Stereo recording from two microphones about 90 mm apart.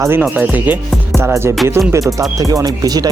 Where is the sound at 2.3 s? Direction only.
40° right (ahead or behind).